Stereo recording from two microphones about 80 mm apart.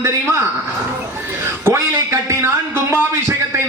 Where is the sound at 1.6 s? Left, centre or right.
Right.